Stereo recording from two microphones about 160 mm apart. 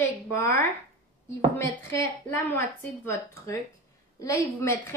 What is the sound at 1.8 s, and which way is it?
Speech, 15° left (ahead or behind).